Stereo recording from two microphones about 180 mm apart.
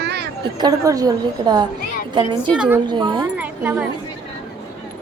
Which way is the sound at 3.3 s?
10° right (ahead or behind).